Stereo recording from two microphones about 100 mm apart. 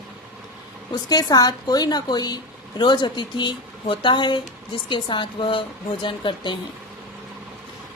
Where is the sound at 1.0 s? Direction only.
40° left (ahead or behind).